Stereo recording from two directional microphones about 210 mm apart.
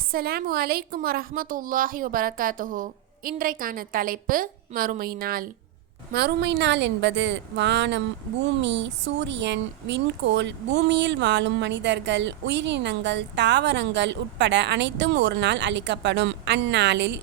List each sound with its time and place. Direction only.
0.1 s a woman's voice: 45° right (ahead or behind)